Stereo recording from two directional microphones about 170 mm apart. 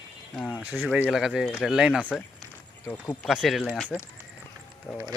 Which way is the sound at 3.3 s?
Centre (ahead or behind).